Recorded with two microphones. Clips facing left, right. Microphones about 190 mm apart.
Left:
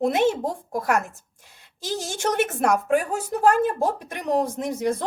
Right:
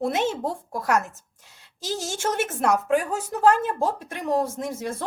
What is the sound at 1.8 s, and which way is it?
Speech, 15° left (ahead or behind).